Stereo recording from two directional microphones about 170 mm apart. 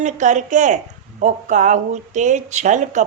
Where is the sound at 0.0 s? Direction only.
45° right (ahead or behind).